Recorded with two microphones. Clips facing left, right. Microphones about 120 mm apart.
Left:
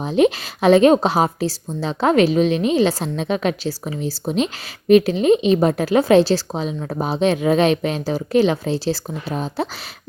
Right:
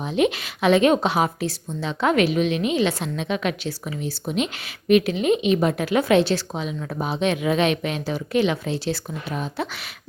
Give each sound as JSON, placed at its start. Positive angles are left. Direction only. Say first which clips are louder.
{"t": 0.0, "sound": "a woman's voice", "louder": "left 5 dB", "side_deg": 35}